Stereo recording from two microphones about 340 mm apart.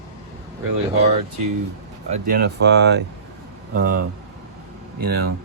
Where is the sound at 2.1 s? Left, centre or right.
Right.